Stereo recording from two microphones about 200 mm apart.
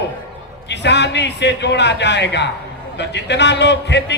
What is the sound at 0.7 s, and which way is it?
A man's voice, 60° left (ahead or behind).